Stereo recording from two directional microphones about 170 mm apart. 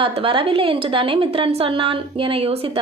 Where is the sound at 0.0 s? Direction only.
30° right (ahead or behind).